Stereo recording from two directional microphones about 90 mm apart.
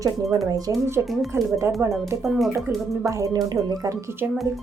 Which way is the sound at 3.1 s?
40° right (ahead or behind).